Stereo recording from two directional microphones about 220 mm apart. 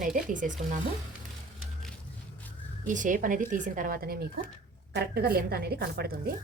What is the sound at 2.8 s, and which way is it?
Speech, 35° right (ahead or behind).